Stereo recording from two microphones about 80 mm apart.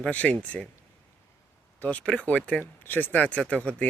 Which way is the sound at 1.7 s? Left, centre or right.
Centre.